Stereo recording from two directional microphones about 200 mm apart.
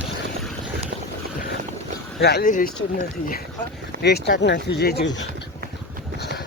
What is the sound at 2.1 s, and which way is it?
Speech, 55° left (ahead or behind).